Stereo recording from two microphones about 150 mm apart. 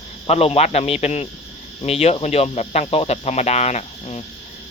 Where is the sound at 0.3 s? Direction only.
45° left (ahead or behind).